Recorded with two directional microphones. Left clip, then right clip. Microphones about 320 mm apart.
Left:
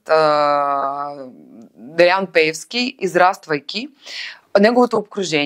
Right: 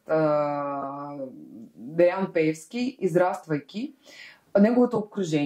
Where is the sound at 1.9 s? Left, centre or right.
Centre.